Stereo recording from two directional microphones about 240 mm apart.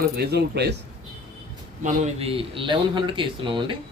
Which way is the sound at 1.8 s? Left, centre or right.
Right.